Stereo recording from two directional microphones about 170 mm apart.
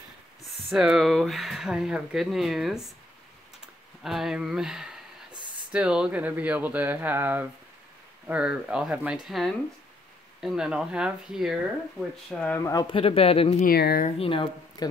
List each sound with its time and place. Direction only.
0.7 s speech: centre (ahead or behind)
4.0 s speech: centre (ahead or behind)
12.3 s speech: 10° left (ahead or behind)
12.8 s speech: 30° left (ahead or behind)
13.6 s speech: 65° left (ahead or behind)
14.0 s speech: 35° left (ahead or behind)